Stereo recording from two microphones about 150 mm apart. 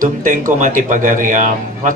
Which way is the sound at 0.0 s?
60° right (ahead or behind).